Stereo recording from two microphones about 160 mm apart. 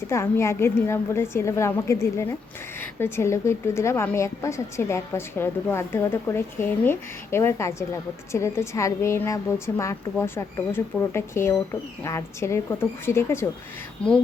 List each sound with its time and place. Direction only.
0.1 s a woman's voice: 15° left (ahead or behind)